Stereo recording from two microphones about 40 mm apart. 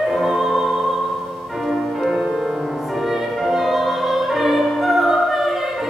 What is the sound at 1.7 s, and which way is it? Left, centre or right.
Music, centre.